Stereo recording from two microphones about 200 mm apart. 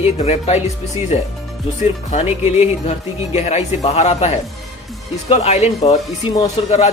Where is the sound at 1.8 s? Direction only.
35° left (ahead or behind).